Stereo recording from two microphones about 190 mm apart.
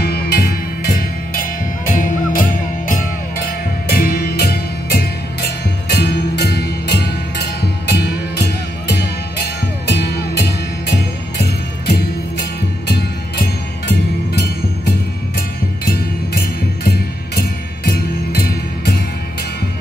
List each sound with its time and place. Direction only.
0.0 s music: 55° left (ahead or behind)
17.4 s music: 55° left (ahead or behind)